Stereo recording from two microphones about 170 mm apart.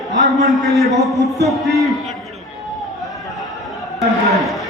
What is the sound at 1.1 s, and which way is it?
Music, 20° right (ahead or behind).